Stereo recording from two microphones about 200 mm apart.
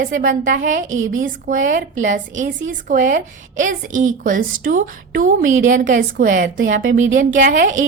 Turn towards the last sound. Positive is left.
turn(degrees=-40)  # may be behind; listen again after turning